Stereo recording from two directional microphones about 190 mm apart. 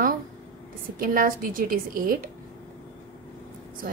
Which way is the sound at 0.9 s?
50° right (ahead or behind).